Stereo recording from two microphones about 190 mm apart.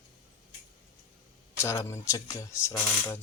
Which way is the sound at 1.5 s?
15° left (ahead or behind).